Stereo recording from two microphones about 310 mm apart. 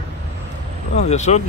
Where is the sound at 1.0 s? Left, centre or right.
Left.